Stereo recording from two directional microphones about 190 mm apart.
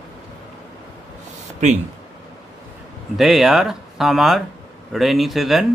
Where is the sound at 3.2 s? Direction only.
Centre (ahead or behind).